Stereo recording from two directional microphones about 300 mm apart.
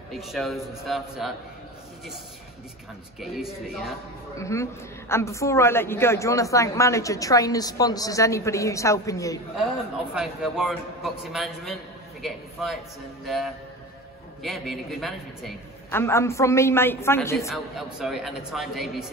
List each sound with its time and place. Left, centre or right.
0.1 s a man's voice: centre
3.2 s a man's voice: centre
10.1 s a man's voice: centre
17.7 s a man's voice: centre